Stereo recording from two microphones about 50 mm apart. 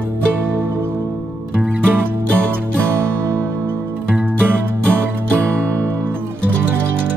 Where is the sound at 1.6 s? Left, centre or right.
Right.